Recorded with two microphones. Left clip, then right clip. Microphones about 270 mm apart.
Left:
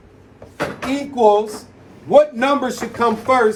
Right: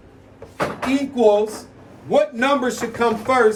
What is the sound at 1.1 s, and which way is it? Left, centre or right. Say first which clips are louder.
Speech: left 3 dB; centre.